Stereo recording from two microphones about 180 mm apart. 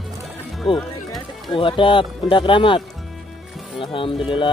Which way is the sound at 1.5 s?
25° left (ahead or behind).